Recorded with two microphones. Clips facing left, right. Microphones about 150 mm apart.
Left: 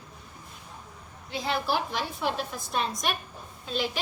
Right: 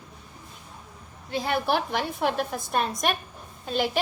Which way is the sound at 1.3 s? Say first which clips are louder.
Right 3 dB; 55° right (ahead or behind).